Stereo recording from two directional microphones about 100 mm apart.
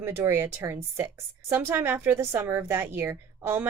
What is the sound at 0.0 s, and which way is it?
Speech, 25° right (ahead or behind).